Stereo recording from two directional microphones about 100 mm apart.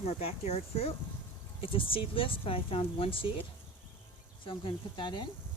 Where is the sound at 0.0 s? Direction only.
90° left.